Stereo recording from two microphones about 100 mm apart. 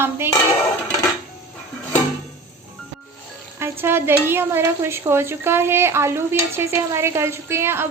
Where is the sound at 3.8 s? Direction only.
25° right (ahead or behind).